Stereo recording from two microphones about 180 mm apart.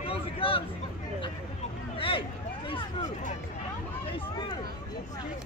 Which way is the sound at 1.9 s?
30° left (ahead or behind).